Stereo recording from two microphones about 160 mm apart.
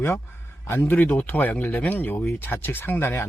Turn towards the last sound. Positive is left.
turn(degrees=15)  # may be behind; listen again after turning